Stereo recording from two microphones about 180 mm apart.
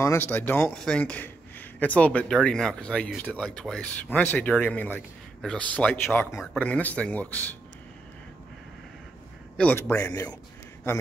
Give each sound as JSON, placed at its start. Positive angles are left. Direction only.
{"t": 0.0, "sound": "speech", "side_deg": 15}
{"t": 9.6, "sound": "speech", "side_deg": 10}